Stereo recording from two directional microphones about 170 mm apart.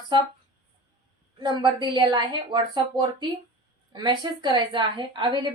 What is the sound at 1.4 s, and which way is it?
A woman's voice, 25° right (ahead or behind).